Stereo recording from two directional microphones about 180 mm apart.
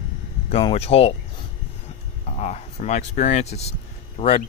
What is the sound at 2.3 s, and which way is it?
Speech, 40° left (ahead or behind).